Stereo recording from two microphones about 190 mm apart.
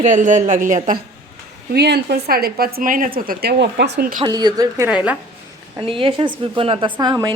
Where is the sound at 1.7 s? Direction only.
60° right (ahead or behind).